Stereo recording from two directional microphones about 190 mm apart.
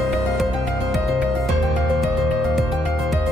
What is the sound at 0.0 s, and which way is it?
Music, centre (ahead or behind).